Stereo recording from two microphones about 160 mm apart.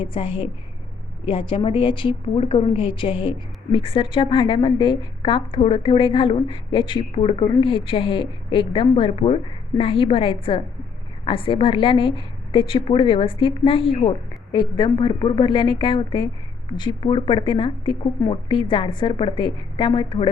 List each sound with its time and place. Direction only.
0.0 s a woman's voice: 35° left (ahead or behind)